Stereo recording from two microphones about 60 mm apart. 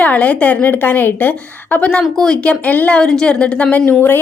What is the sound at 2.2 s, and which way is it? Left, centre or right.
Speech, centre.